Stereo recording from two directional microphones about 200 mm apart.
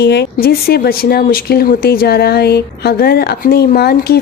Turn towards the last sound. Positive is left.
turn(degrees=50)  # may be behind; listen again after turning